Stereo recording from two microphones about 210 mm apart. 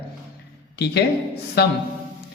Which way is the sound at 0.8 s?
50° left (ahead or behind).